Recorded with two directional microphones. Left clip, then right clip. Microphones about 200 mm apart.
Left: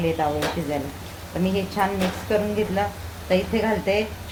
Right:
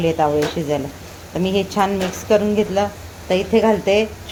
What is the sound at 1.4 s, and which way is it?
A woman's voice, 50° right (ahead or behind).